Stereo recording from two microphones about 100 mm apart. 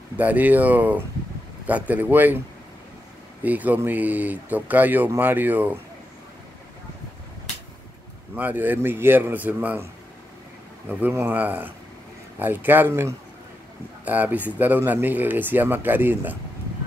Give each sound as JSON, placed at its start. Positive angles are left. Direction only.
{"t": 0.2, "sound": "speech", "side_deg": -15}
{"t": 3.4, "sound": "speech", "side_deg": -15}
{"t": 8.4, "sound": "speech", "side_deg": -15}
{"t": 10.9, "sound": "speech", "side_deg": -20}